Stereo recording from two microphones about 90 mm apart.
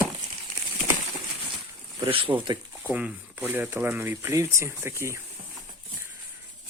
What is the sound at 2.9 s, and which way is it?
Speech, 15° right (ahead or behind).